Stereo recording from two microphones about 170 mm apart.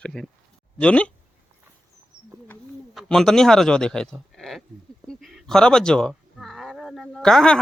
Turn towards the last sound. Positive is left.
turn(degrees=5)  # may be behind; listen again after turning